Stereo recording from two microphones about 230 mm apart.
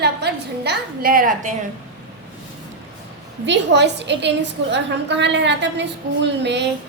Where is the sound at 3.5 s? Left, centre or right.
Right.